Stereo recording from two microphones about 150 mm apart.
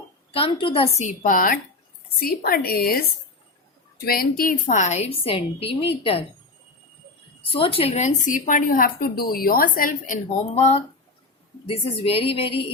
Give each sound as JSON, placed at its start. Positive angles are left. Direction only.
{"t": 0.3, "sound": "a woman's voice", "side_deg": 40}
{"t": 1.0, "sound": "a woman's voice", "side_deg": 60}
{"t": 2.1, "sound": "a woman's voice", "side_deg": 80}
{"t": 4.0, "sound": "a woman's voice", "side_deg": 85}
{"t": 4.6, "sound": "a woman's voice", "side_deg": 50}
{"t": 7.5, "sound": "a woman's voice", "side_deg": 35}
{"t": 10.5, "sound": "a woman's voice", "side_deg": 45}